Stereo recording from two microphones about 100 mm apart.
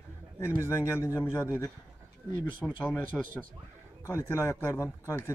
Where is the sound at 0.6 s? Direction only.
25° left (ahead or behind).